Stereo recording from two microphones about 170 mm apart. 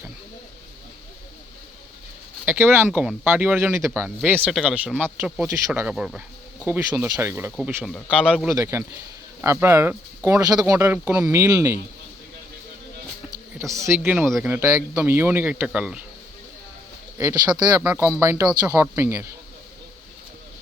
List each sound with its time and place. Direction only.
2.5 s speech: 15° right (ahead or behind)
7.9 s speech: 5° left (ahead or behind)
8.4 s speech: 15° right (ahead or behind)
13.6 s speech: 20° right (ahead or behind)
14.3 s speech: centre (ahead or behind)
14.5 s speech: 15° right (ahead or behind)
17.5 s speech: 10° right (ahead or behind)